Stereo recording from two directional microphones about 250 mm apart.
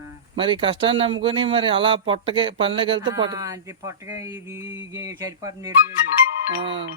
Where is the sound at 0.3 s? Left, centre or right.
Centre.